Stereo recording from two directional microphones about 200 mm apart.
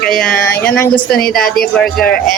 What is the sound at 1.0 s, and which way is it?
Speech, 50° left (ahead or behind).